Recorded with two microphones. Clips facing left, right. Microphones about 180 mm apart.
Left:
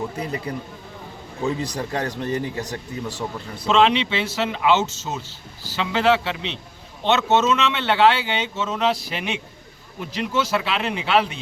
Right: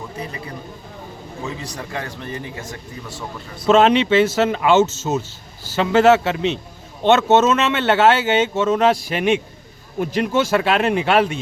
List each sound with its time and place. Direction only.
1.5 s a man's voice: 35° left (ahead or behind)
3.7 s speech: 45° right (ahead or behind)